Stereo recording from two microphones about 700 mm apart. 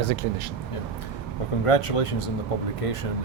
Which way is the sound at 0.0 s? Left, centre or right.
Right.